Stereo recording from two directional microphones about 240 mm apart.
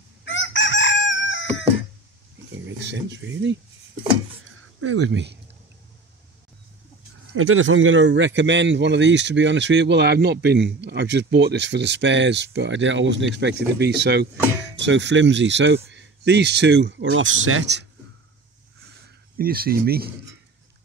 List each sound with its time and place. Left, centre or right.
0.2 s chicken: left
2.5 s speech: right
4.5 s a sound: right
7.3 s speech: right
19.3 s speech: right